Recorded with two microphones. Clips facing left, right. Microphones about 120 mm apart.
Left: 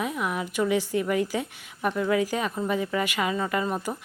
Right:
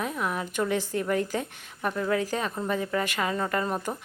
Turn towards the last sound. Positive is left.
turn(degrees=5)  # may be behind; listen again after turning